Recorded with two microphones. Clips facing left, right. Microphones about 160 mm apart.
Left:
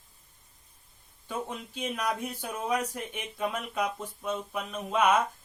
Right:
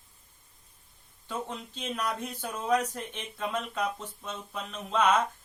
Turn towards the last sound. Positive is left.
turn(degrees=10)  # may be behind; listen again after turning